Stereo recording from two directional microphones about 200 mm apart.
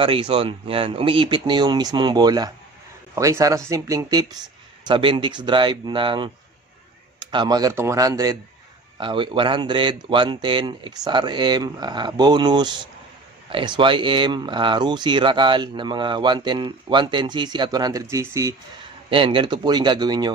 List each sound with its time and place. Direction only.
0.0 s speech: 25° right (ahead or behind)